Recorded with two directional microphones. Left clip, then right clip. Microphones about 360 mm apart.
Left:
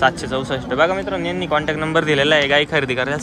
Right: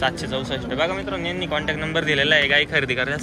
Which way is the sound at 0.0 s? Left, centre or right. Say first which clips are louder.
Left 6 dB; centre.